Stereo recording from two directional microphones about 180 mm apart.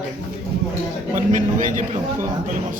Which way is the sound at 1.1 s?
45° right (ahead or behind).